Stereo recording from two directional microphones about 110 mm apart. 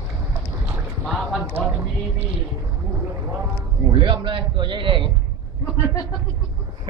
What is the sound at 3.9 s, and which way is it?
A man's voice, 45° right (ahead or behind).